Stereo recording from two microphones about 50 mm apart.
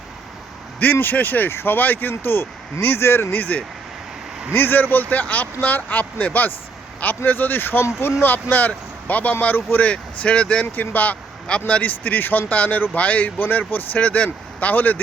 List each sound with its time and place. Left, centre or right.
0.8 s speech: left
3.3 s speech: left
10.8 s speech: left